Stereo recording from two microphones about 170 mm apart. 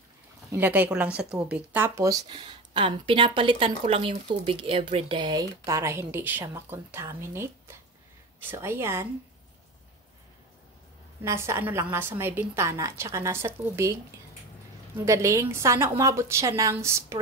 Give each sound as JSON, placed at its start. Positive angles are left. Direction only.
{"t": 0.5, "sound": "a woman's voice", "side_deg": -10}
{"t": 2.2, "sound": "a woman's voice", "side_deg": -30}
{"t": 11.2, "sound": "a woman's voice", "side_deg": -15}
{"t": 15.0, "sound": "a woman's voice", "side_deg": -15}